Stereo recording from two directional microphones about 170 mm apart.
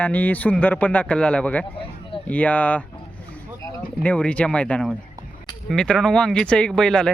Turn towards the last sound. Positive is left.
turn(degrees=5)  # may be behind; listen again after turning